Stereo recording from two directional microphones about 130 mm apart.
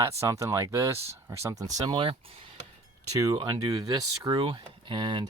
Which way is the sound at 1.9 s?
45° right (ahead or behind).